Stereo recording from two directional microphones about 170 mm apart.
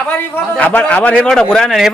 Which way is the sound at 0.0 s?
5° left (ahead or behind).